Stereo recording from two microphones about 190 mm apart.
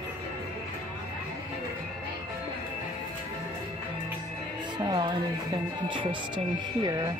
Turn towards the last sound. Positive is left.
turn(degrees=-25)  # may be behind; listen again after turning